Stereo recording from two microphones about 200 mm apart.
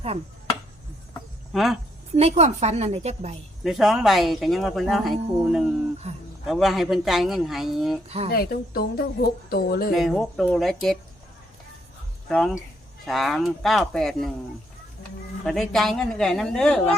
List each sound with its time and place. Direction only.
1.5 s speech: centre (ahead or behind)
2.1 s a woman's voice: 30° right (ahead or behind)
3.6 s speech: centre (ahead or behind)
8.0 s a woman's voice: 30° right (ahead or behind)
8.3 s speech: 50° left (ahead or behind)
9.9 s speech: centre (ahead or behind)
12.3 s speech: centre (ahead or behind)
15.4 s speech: centre (ahead or behind)